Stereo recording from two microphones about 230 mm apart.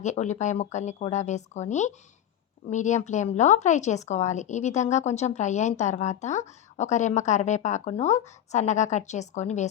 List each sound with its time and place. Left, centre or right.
0.0 s speech: left